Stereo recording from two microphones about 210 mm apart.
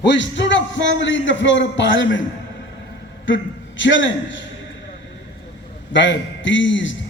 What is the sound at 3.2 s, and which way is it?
A man's voice, 60° left (ahead or behind).